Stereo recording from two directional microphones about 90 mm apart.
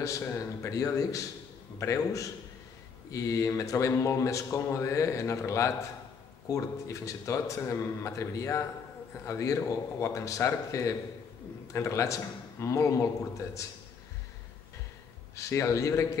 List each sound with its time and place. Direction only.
0.0 s a man's voice: 35° left (ahead or behind)
15.3 s speech: 35° left (ahead or behind)